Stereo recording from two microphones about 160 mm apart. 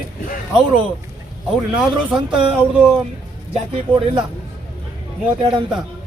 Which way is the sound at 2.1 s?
30° right (ahead or behind).